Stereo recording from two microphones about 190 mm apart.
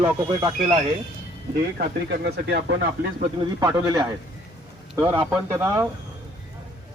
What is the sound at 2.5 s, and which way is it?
Speech, 60° right (ahead or behind).